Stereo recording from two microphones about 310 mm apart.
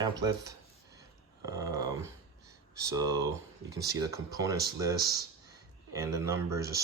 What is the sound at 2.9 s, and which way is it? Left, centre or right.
Speech, centre.